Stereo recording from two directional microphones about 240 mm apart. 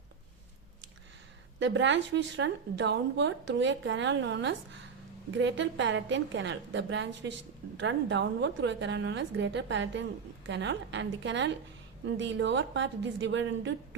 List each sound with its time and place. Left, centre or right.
1.5 s a woman's voice: right